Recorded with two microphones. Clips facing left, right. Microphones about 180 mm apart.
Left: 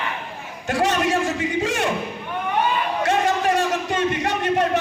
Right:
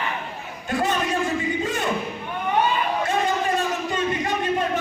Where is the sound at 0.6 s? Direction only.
80° left.